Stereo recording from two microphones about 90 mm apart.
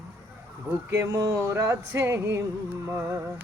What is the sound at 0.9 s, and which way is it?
Speech, 30° right (ahead or behind).